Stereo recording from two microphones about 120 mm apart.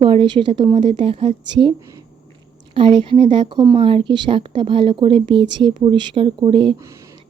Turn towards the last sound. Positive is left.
turn(degrees=-45)  # may be behind; listen again after turning